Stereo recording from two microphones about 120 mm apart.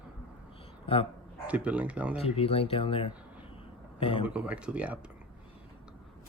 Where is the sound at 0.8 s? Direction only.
50° left (ahead or behind).